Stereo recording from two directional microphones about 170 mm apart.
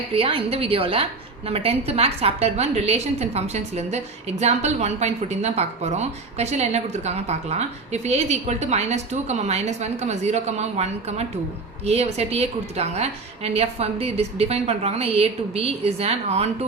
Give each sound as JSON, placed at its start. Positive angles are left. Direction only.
{"t": 0.1, "sound": "a woman's voice", "side_deg": -35}